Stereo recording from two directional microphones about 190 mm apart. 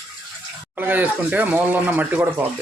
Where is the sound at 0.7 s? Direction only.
10° right (ahead or behind).